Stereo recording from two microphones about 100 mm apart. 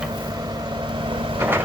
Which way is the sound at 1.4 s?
20° right (ahead or behind).